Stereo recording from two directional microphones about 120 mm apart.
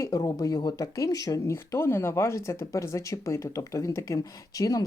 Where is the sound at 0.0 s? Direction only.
30° left (ahead or behind).